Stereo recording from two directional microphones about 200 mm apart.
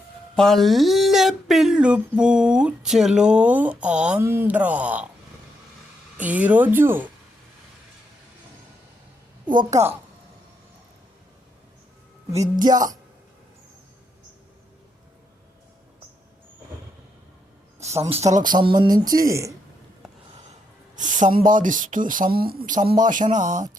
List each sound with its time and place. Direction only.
0.3 s speech: centre (ahead or behind)
6.1 s speech: 5° right (ahead or behind)
9.5 s speech: 40° right (ahead or behind)
12.4 s speech: 20° right (ahead or behind)
18.1 s speech: 35° right (ahead or behind)
18.4 s speech: 20° right (ahead or behind)
20.9 s speech: 40° right (ahead or behind)